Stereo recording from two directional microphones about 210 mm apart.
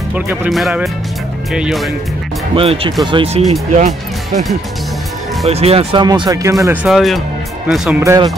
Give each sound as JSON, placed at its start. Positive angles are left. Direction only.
{"t": 0.1, "sound": "speech", "side_deg": -5}
{"t": 2.5, "sound": "speech", "side_deg": -25}
{"t": 3.7, "sound": "speech", "side_deg": -35}
{"t": 5.5, "sound": "speech", "side_deg": -30}
{"t": 6.6, "sound": "speech", "side_deg": -5}
{"t": 8.0, "sound": "speech", "side_deg": -15}